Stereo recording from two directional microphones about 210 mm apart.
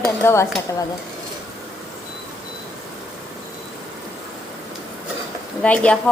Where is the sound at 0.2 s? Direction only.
15° left (ahead or behind).